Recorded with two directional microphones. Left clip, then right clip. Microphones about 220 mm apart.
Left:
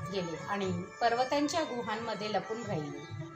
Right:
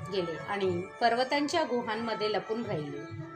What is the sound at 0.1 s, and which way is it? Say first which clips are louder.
A woman's voice: right 3 dB; 35° right (ahead or behind).